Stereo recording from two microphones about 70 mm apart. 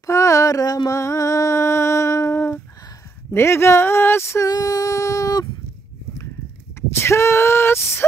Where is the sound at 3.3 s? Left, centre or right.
Left.